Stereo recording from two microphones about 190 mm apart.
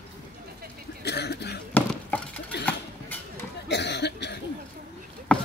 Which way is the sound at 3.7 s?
65° left (ahead or behind).